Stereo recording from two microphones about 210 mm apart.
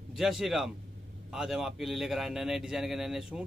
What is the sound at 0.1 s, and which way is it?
A man's voice, centre (ahead or behind).